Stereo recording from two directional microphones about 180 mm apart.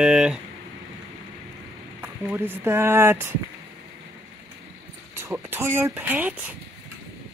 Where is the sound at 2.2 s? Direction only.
10° right (ahead or behind).